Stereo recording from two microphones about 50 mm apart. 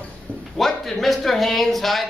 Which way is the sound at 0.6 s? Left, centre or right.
Centre.